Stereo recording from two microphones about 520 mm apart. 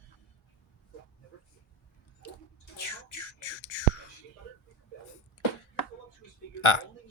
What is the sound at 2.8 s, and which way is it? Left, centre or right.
Whispering, left.